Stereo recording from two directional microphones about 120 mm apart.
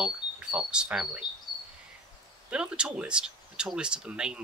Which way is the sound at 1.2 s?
35° left (ahead or behind).